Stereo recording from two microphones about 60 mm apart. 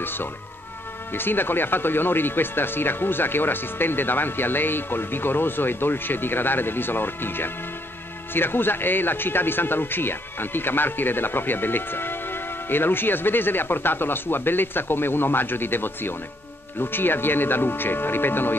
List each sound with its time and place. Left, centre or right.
1.1 s a man's voice: left